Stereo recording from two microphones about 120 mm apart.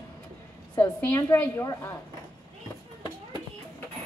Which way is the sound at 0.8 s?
20° left (ahead or behind).